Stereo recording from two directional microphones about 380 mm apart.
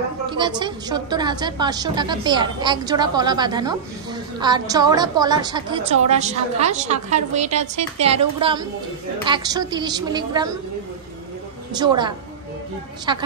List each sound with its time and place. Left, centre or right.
0.3 s a woman's voice: centre
11.7 s a woman's voice: centre